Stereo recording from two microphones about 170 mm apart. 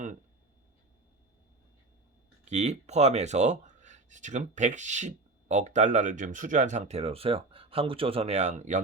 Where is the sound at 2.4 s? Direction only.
40° right (ahead or behind).